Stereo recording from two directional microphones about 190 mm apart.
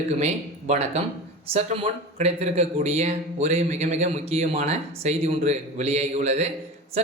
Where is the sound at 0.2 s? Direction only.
35° right (ahead or behind).